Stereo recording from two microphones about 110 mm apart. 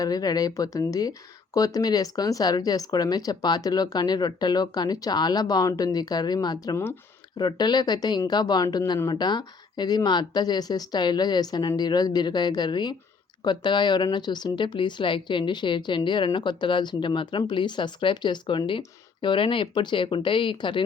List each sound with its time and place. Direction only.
0.0 s speech: 35° left (ahead or behind)